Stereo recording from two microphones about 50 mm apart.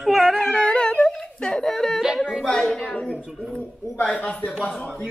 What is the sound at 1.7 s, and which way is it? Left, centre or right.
A woman's voice, centre.